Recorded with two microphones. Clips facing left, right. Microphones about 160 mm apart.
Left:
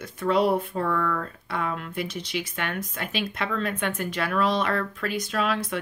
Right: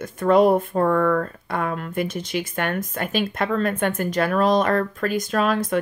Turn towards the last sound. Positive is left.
turn(degrees=-45)  # may be behind; listen again after turning